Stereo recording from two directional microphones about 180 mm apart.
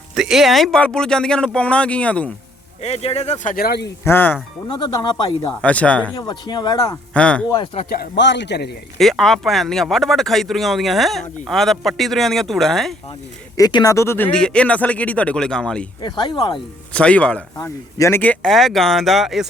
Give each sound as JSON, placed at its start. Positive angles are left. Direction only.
{"t": 0.2, "sound": "speech", "side_deg": 0}
{"t": 2.8, "sound": "speech", "side_deg": 35}
{"t": 4.0, "sound": "speech", "side_deg": 10}
{"t": 4.7, "sound": "speech", "side_deg": 25}
{"t": 5.6, "sound": "speech", "side_deg": 5}
{"t": 6.1, "sound": "speech", "side_deg": 25}
{"t": 7.1, "sound": "speech", "side_deg": 5}
{"t": 7.5, "sound": "speech", "side_deg": 30}
{"t": 8.1, "sound": "a man's voice", "side_deg": 75}
{"t": 9.0, "sound": "speech", "side_deg": 0}
{"t": 13.6, "sound": "speech", "side_deg": 25}
{"t": 16.0, "sound": "speech", "side_deg": 25}
{"t": 16.9, "sound": "speech", "side_deg": 5}
{"t": 17.6, "sound": "speech", "side_deg": 20}